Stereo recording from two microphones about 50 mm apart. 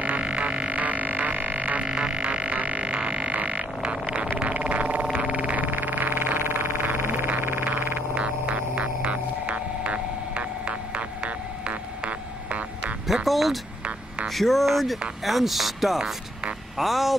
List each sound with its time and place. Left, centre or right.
0.0 s music: right
1.9 s didgeridoo: centre
4.4 s a sound: right
5.0 s vehicle: right
7.6 s music: right
8.1 s music: right
13.0 s music: centre
14.2 s a sound: centre